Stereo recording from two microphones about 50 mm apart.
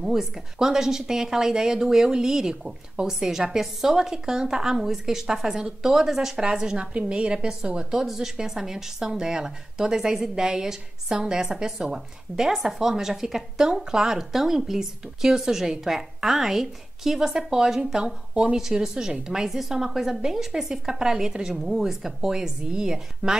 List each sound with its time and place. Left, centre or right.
0.0 s a woman's voice: centre